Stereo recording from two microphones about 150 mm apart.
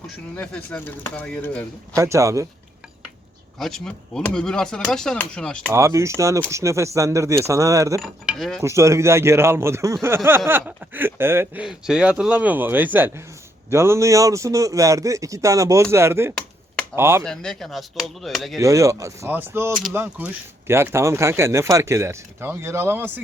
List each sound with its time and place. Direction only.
0.3 s speech: 10° left (ahead or behind)
2.0 s a man's voice: 20° right (ahead or behind)
3.6 s speech: 5° left (ahead or behind)
5.7 s a man's voice: 20° right (ahead or behind)
8.0 s speech: centre (ahead or behind)
8.6 s a man's voice: 20° right (ahead or behind)
17.2 s speech: 5° left (ahead or behind)
18.5 s a man's voice: 20° right (ahead or behind)